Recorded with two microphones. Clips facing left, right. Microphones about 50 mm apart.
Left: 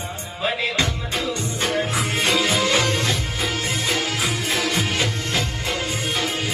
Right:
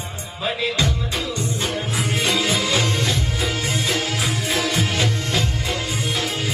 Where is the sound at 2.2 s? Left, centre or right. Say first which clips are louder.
Left 2 dB; left.